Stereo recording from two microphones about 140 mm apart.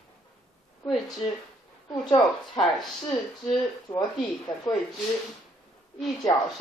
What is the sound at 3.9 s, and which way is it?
Speech, 35° left (ahead or behind).